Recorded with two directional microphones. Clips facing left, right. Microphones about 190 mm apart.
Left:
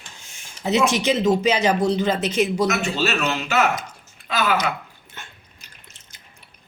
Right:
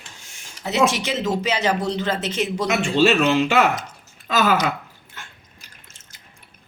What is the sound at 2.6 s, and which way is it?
Speech, 30° right (ahead or behind).